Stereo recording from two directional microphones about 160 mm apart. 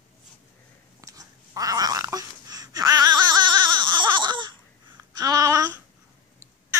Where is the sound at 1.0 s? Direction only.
20° right (ahead or behind).